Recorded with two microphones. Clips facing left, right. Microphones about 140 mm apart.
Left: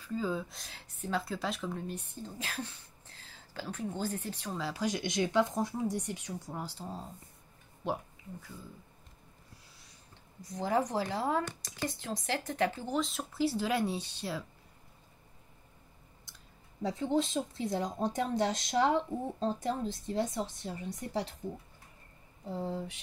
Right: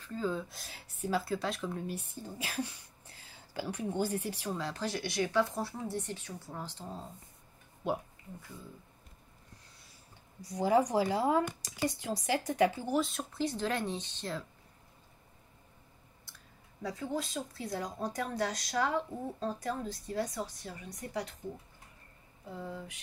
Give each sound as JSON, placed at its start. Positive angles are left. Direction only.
{"t": 0.0, "sound": "speech", "side_deg": 5}
{"t": 4.6, "sound": "speech", "side_deg": 5}
{"t": 4.8, "sound": "speech", "side_deg": 20}
{"t": 10.4, "sound": "speech", "side_deg": -10}
{"t": 16.8, "sound": "speech", "side_deg": 25}
{"t": 22.5, "sound": "speech", "side_deg": 30}